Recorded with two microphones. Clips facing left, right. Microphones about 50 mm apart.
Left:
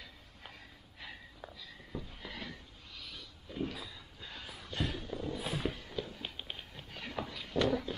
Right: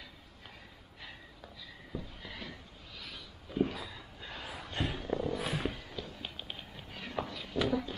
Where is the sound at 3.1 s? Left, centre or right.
Centre.